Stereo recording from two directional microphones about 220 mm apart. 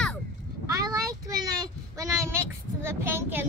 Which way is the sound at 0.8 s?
15° right (ahead or behind).